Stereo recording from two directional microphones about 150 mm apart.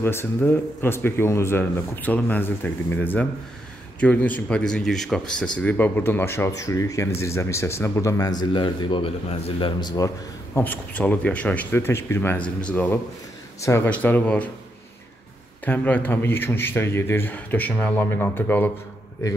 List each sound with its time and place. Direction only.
0.0 s speech: 15° left (ahead or behind)
15.6 s speech: 10° left (ahead or behind)